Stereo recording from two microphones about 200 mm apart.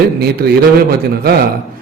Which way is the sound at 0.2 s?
50° right (ahead or behind).